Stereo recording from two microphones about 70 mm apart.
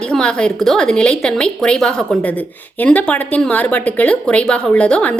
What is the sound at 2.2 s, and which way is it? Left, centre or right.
A woman's voice, left.